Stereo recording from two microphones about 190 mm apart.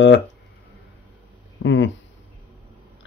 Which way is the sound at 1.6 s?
75° left (ahead or behind).